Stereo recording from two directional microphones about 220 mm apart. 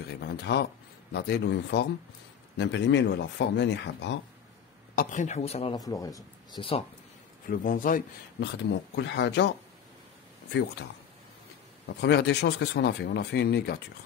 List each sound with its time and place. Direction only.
0.1 s speech: 45° left (ahead or behind)
4.9 s speech: 35° left (ahead or behind)
5.8 s speech: 15° left (ahead or behind)
7.4 s a man's voice: 40° left (ahead or behind)
8.4 s speech: 55° left (ahead or behind)
12.0 s speech: 50° left (ahead or behind)